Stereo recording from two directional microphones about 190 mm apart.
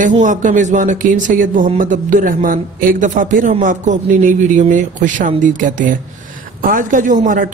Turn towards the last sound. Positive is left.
turn(degrees=-45)  # may be behind; listen again after turning